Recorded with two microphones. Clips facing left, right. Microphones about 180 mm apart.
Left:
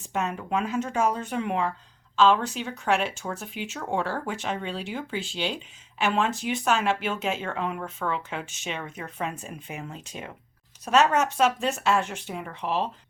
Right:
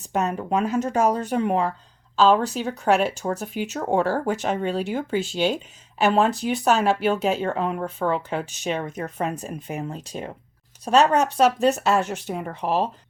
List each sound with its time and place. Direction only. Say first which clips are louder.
0.0 s speech: right 5 dB; 40° right (ahead or behind)